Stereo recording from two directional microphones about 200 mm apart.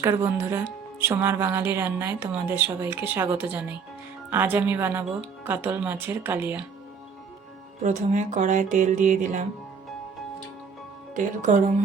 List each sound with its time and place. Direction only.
0.0 s speech: 10° right (ahead or behind)
7.8 s speech: 35° right (ahead or behind)
11.1 s speech: 40° right (ahead or behind)